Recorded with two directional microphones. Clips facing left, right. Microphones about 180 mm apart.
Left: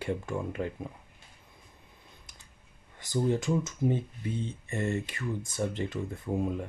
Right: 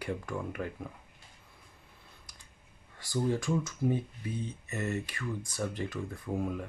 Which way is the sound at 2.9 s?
20° left (ahead or behind).